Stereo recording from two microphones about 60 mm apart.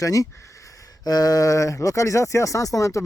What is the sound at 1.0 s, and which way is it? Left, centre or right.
Speech, left.